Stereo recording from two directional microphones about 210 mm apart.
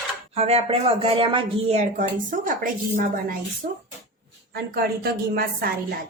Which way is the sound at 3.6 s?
40° right (ahead or behind).